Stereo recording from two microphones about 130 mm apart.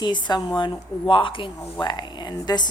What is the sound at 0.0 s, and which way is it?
A woman's voice, 35° left (ahead or behind).